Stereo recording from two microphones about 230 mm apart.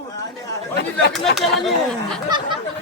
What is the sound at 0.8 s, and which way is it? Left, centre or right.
Speech, left.